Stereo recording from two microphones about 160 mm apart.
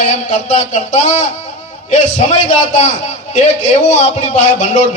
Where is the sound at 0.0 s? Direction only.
45° left (ahead or behind).